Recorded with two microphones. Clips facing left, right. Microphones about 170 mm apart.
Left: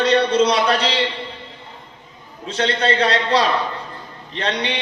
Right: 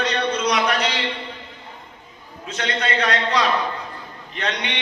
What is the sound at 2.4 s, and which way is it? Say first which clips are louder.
A man's voice: left 6 dB; 30° left (ahead or behind).